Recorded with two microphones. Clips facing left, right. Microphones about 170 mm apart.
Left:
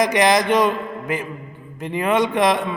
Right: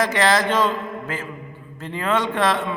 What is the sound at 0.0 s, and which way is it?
A man's voice, 15° left (ahead or behind).